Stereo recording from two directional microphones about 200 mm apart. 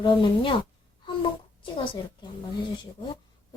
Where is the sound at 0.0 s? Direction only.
25° left (ahead or behind).